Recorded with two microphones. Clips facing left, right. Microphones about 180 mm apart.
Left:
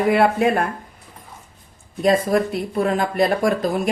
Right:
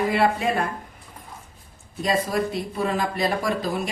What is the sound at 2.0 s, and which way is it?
A woman's voice, 55° left (ahead or behind).